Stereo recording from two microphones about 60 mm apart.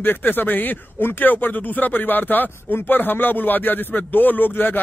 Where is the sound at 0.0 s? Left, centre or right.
Left.